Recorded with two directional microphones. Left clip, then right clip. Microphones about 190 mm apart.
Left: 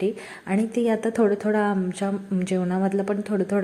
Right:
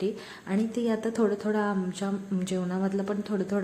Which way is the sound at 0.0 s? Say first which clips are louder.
Left 5 dB; 20° left (ahead or behind).